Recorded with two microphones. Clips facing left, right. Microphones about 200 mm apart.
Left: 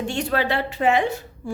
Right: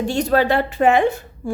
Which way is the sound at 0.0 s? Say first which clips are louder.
Right 6 dB; 40° right (ahead or behind).